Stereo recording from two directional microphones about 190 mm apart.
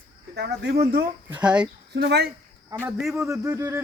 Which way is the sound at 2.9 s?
Centre (ahead or behind).